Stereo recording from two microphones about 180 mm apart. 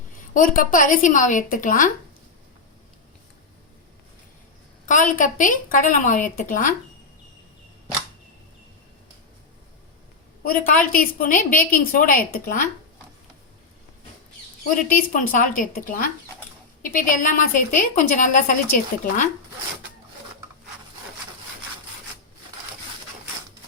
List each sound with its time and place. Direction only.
0.2 s a woman's voice: 50° left (ahead or behind)
4.9 s a woman's voice: 45° left (ahead or behind)
10.7 s a woman's voice: 50° left (ahead or behind)
14.8 s a woman's voice: 50° left (ahead or behind)